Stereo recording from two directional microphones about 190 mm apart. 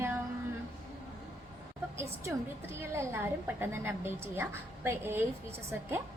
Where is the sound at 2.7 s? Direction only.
15° right (ahead or behind).